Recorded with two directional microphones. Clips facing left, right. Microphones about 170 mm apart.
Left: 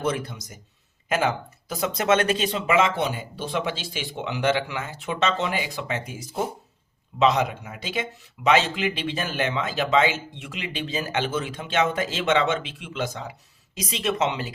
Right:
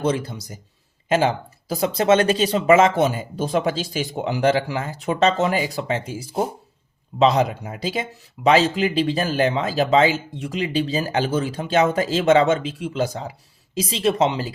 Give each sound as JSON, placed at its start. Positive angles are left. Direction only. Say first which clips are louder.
{"t": 0.0, "sound": "speech", "louder": "right 4 dB", "side_deg": -30}